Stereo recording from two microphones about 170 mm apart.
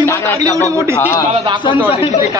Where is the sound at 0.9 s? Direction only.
15° left (ahead or behind).